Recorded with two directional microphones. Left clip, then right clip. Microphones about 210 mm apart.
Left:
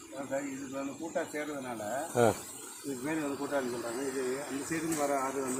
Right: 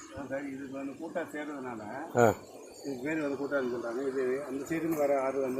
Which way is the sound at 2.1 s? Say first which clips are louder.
Right 3 dB; 15° right (ahead or behind).